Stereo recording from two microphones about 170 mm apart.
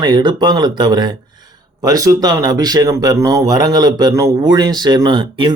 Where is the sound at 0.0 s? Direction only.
25° right (ahead or behind).